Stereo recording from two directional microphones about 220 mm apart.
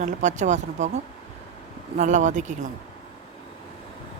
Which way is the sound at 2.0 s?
35° right (ahead or behind).